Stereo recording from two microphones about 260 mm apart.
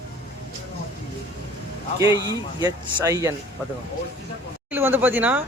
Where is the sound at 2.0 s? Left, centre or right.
Centre.